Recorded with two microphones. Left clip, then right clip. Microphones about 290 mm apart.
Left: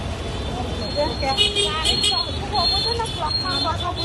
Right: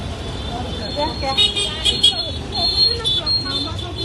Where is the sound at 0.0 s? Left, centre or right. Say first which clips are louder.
Even; centre.